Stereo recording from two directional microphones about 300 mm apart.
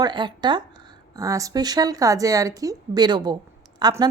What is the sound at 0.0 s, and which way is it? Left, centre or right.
Music, centre.